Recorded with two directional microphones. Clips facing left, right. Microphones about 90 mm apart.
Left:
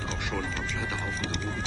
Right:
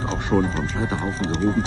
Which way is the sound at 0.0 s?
35° right (ahead or behind).